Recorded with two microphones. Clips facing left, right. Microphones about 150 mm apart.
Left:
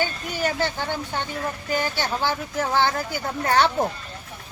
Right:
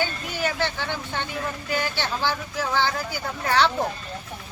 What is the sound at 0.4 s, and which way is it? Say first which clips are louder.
Speech: left 2 dB; 40° left (ahead or behind).